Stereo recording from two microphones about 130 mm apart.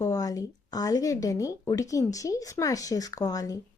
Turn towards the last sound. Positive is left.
turn(degrees=30)  # may be behind; listen again after turning